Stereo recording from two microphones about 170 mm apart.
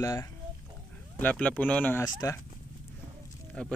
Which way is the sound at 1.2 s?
10° left (ahead or behind).